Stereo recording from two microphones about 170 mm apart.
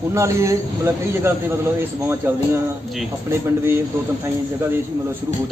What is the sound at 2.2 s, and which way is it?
Speech, 15° right (ahead or behind).